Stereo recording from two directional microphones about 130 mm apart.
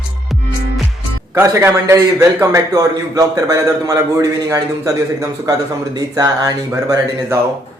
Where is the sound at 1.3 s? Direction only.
20° right (ahead or behind).